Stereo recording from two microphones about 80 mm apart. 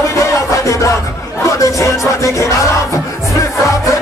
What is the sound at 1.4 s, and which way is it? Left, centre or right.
Chatter, left.